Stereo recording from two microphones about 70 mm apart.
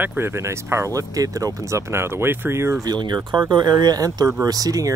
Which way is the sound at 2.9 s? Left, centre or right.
Right.